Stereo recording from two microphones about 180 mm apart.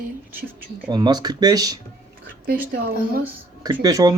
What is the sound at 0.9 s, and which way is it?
Speech, 20° right (ahead or behind).